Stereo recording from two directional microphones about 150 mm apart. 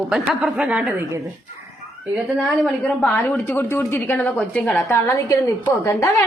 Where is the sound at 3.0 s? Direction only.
10° left (ahead or behind).